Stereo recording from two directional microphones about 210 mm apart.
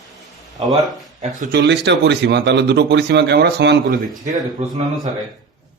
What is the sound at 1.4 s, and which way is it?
Speech, 50° right (ahead or behind).